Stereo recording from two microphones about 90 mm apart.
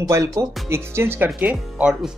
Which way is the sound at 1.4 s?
15° right (ahead or behind).